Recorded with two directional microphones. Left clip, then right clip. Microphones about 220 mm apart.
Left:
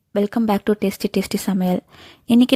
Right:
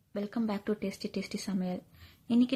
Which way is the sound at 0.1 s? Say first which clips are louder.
Left 16 dB; 45° left (ahead or behind).